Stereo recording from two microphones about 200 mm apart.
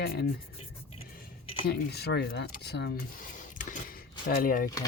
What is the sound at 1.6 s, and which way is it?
Speech, 55° left (ahead or behind).